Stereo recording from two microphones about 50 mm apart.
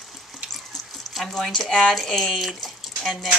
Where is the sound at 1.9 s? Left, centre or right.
Centre.